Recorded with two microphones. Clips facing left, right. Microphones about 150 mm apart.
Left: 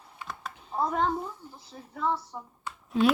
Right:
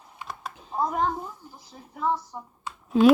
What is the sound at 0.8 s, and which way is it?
Speech, 30° right (ahead or behind).